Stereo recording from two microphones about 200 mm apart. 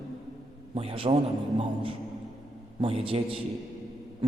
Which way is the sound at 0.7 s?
30° right (ahead or behind).